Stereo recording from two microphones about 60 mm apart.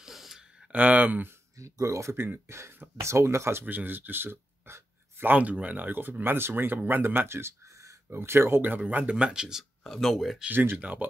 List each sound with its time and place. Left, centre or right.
0.0 s a sound: centre
0.7 s speech: right
1.6 s speech: right
3.6 s speech: right
5.3 s speech: right
8.5 s speech: right; by 9.7 s centre
9.8 s speech: centre
10.5 s speech: right